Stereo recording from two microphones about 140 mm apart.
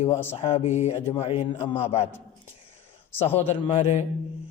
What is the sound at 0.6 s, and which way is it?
A man's voice, 55° left (ahead or behind).